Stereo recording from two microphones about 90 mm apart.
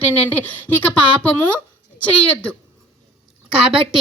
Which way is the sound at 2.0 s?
15° left (ahead or behind).